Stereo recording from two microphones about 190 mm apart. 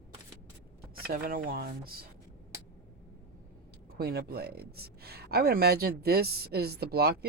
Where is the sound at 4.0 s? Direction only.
55° right (ahead or behind).